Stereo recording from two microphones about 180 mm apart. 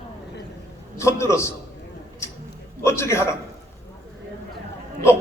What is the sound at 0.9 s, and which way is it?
Speech, 15° left (ahead or behind).